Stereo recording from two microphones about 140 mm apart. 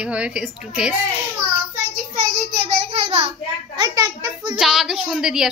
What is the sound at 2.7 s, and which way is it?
Child singing, 45° right (ahead or behind).